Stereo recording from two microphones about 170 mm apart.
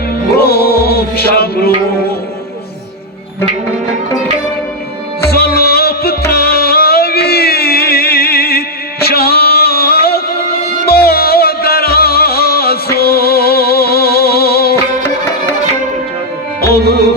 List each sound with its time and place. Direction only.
0.3 s music: 65° left (ahead or behind)
5.3 s music: 65° left (ahead or behind)
16.6 s music: 65° left (ahead or behind)